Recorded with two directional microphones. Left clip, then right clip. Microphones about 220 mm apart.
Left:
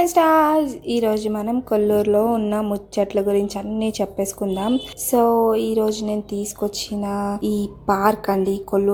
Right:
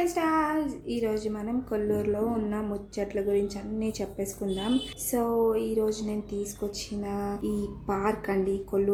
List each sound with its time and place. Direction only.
0.0 s a woman's voice: 40° left (ahead or behind)